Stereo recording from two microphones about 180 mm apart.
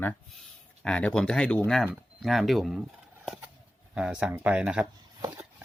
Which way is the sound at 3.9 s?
5° right (ahead or behind).